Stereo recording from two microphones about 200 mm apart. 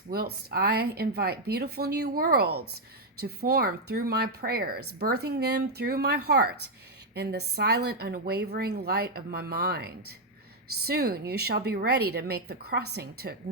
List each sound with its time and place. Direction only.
0.1 s a woman's voice: 50° right (ahead or behind)